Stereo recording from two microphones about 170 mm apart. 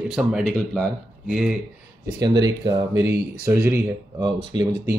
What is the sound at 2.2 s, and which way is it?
Speech, 20° right (ahead or behind).